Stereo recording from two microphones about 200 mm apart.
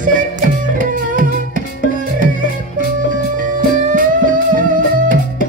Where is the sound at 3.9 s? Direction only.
40° right (ahead or behind).